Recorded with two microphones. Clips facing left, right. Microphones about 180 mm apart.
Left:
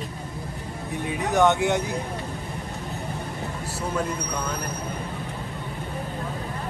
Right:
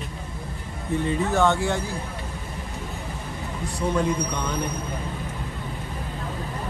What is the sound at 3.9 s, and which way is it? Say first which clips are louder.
Speech: right 3 dB; 5° left (ahead or behind).